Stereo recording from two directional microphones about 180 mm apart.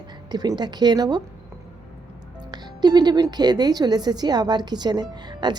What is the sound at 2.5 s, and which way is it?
Speech, 25° right (ahead or behind).